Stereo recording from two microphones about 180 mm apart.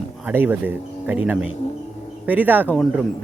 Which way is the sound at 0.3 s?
10° right (ahead or behind).